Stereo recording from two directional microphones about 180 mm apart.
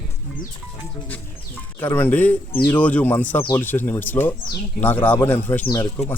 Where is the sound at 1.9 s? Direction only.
10° left (ahead or behind).